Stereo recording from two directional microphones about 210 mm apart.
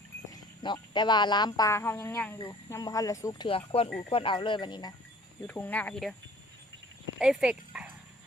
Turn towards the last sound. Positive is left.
turn(degrees=-5)  # may be behind; listen again after turning